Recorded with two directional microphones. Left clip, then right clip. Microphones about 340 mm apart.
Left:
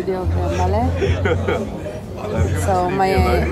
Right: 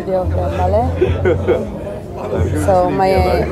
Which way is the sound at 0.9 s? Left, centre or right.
Right.